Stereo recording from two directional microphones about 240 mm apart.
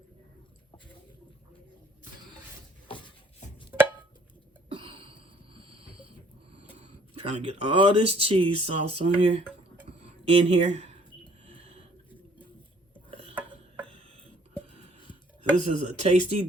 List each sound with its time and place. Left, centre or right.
4.7 s a sound: right
7.2 s speech: right
11.4 s snort: right
15.5 s speech: right